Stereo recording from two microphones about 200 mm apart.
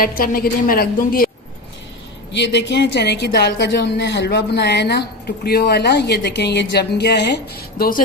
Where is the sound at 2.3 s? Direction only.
60° left (ahead or behind).